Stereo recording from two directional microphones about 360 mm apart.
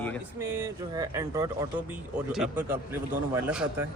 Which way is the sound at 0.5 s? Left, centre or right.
Centre.